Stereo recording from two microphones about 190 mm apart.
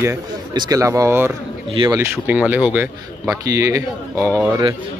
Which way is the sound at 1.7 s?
25° right (ahead or behind).